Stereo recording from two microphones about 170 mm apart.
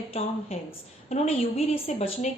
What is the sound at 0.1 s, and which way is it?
A woman's voice, 35° left (ahead or behind).